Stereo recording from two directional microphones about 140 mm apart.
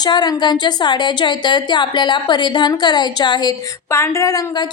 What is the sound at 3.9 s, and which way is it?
Speech, 20° left (ahead or behind).